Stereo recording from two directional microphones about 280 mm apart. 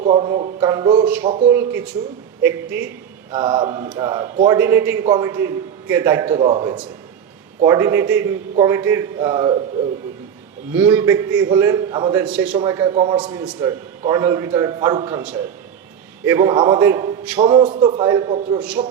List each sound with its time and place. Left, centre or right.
0.0 s a man's voice: centre
10.8 s a man's voice: centre
16.2 s a man's voice: centre